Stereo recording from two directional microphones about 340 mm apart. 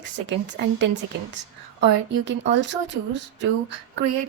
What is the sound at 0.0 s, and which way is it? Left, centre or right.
A woman's voice, right.